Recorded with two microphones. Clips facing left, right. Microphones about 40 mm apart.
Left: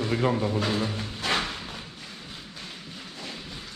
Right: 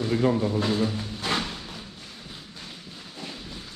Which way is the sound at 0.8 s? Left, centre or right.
Centre.